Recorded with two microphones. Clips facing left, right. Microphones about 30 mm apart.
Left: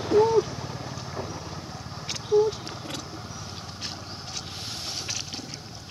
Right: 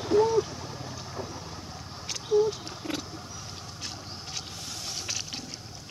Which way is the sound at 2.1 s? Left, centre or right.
Centre.